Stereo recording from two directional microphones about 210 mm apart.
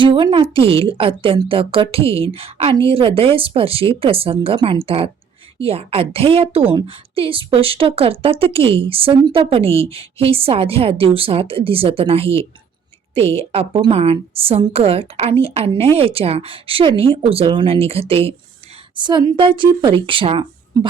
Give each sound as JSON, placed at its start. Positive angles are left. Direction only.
{"t": 0.0, "sound": "a woman's voice", "side_deg": -25}